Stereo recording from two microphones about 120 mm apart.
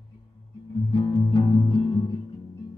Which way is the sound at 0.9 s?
40° left (ahead or behind).